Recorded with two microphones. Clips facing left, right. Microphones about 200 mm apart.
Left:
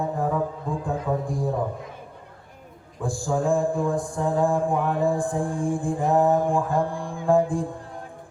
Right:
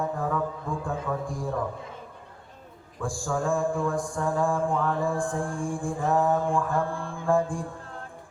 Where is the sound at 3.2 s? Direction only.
20° left (ahead or behind).